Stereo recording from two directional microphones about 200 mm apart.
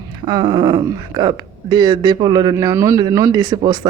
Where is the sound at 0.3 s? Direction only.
20° right (ahead or behind).